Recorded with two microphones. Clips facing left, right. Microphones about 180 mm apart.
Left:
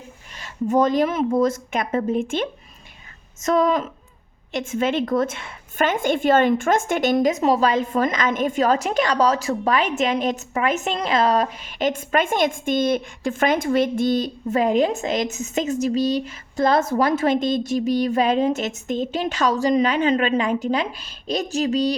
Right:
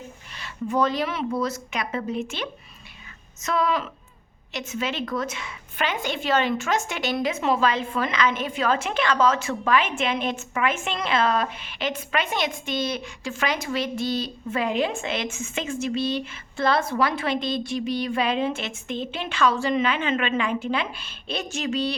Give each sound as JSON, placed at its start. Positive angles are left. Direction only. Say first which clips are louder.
{"t": 0.3, "sound": "a woman's voice", "louder": "left 5 dB", "side_deg": 45}